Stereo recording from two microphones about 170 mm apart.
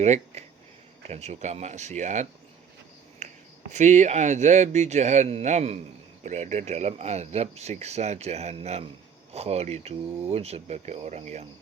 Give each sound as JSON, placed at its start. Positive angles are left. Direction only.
{"t": 0.0, "sound": "speech", "side_deg": -40}
{"t": 3.2, "sound": "a sound", "side_deg": -45}
{"t": 3.7, "sound": "speech", "side_deg": -45}